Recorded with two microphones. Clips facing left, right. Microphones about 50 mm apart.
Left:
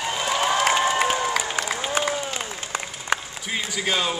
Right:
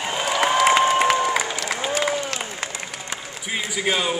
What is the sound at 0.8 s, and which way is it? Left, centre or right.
Crowd, centre.